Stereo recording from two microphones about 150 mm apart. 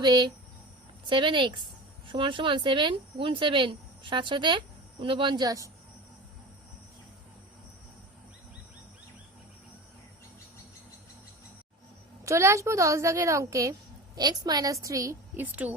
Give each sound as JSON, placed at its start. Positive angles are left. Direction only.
{"t": 0.0, "sound": "speech", "side_deg": -25}
{"t": 12.2, "sound": "speech", "side_deg": -20}